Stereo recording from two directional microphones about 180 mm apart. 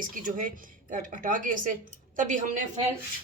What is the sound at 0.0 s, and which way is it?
Speech, 50° right (ahead or behind).